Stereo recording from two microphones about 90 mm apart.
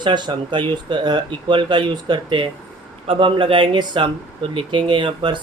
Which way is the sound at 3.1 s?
75° right (ahead or behind).